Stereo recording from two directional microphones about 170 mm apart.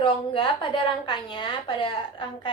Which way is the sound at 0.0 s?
30° left (ahead or behind).